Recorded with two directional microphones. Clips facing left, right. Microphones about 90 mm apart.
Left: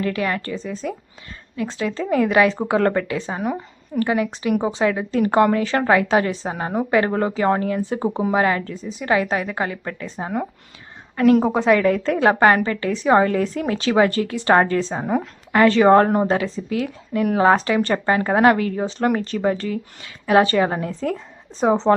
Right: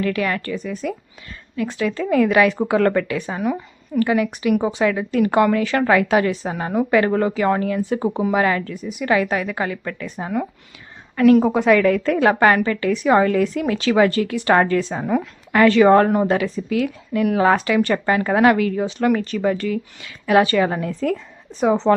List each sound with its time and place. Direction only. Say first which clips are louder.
0.0 s a woman's voice: right 1 dB; 30° left (ahead or behind)